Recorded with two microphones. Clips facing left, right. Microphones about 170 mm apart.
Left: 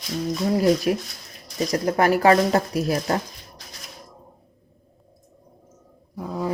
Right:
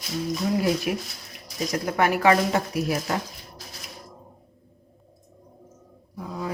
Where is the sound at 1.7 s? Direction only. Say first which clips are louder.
Left 4 dB; 35° left (ahead or behind).